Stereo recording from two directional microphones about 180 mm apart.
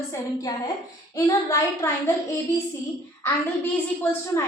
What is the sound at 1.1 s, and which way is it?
Speech, 15° left (ahead or behind).